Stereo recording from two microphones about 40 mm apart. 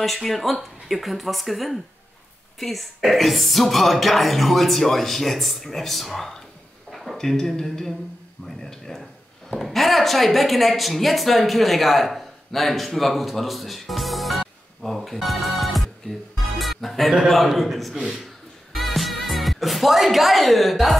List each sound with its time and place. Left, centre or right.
0.0 s speech: centre
6.9 s a sound: centre
7.2 s speech: centre
18.0 s music: centre